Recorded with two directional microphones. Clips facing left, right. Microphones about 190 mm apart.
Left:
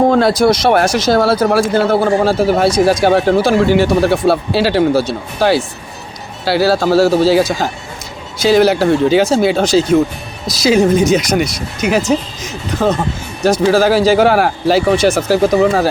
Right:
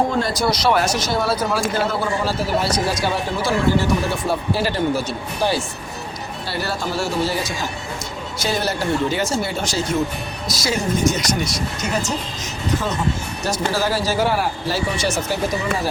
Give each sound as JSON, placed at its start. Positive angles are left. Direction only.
{"t": 0.1, "sound": "speech", "side_deg": 75}
{"t": 0.6, "sound": "speech", "side_deg": 60}
{"t": 10.8, "sound": "speech", "side_deg": 80}
{"t": 13.4, "sound": "speech", "side_deg": 90}